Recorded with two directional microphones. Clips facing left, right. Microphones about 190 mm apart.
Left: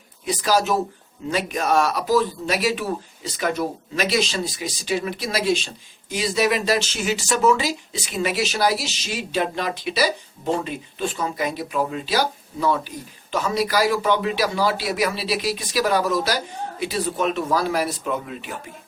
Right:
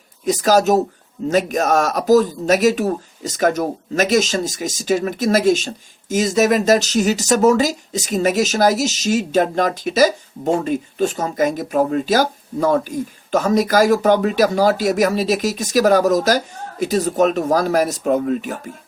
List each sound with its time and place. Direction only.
0.3 s speech: 45° right (ahead or behind)